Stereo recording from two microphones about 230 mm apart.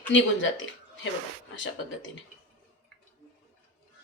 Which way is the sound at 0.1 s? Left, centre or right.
Left.